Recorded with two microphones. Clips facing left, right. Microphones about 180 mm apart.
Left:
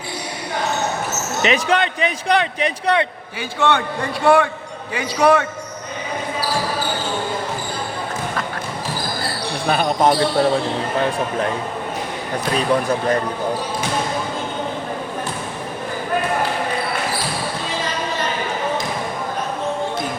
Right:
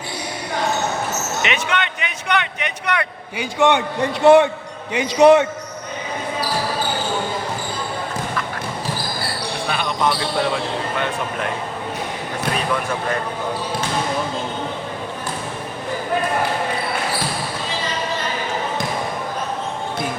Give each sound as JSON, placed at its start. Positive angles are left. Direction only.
{"t": 1.4, "sound": "speech", "side_deg": 35}
{"t": 3.3, "sound": "a man's voice", "side_deg": -15}
{"t": 9.6, "sound": "speech", "side_deg": 40}
{"t": 12.7, "sound": "speech", "side_deg": 35}